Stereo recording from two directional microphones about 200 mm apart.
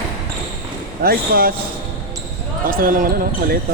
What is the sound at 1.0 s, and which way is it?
Speech, 45° right (ahead or behind).